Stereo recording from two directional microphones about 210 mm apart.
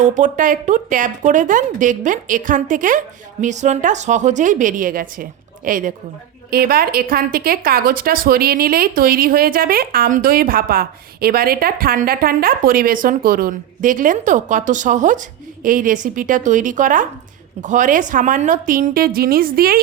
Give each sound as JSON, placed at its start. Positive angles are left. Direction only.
{"t": 0.0, "sound": "a woman's voice", "side_deg": -35}